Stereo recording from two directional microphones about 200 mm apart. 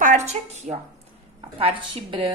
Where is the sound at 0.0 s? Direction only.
35° right (ahead or behind).